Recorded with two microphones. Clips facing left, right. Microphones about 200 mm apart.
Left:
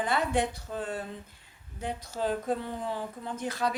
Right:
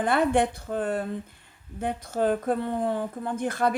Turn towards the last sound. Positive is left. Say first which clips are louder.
# right 6 dB
turn(degrees=-55)  # may be behind; listen again after turning